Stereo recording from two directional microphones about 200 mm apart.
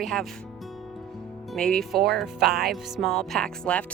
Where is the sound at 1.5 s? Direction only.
Centre (ahead or behind).